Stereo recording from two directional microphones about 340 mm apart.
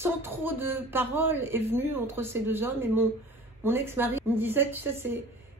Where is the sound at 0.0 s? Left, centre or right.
Centre.